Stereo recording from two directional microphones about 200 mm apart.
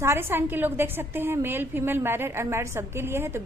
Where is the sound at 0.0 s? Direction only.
10° right (ahead or behind).